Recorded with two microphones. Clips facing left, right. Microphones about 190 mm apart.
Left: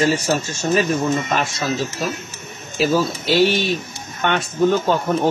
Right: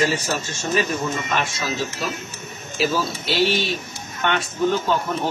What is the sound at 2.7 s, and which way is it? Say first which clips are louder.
A man's voice: left 4 dB; 45° left (ahead or behind).